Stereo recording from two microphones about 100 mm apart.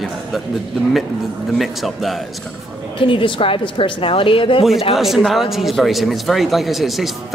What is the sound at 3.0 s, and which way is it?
A woman's voice, 60° left (ahead or behind).